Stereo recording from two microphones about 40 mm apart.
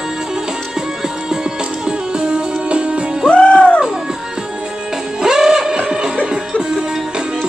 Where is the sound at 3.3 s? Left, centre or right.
Left.